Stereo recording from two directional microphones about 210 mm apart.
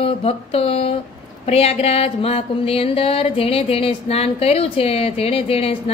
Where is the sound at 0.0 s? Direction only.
25° left (ahead or behind).